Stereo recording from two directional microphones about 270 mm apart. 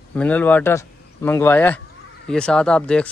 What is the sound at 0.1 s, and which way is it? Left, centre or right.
A man's voice, centre.